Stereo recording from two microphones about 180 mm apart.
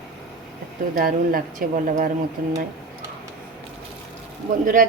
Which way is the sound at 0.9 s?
50° right (ahead or behind).